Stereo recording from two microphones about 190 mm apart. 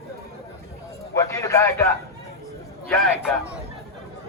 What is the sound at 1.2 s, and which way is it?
Speech, 15° left (ahead or behind).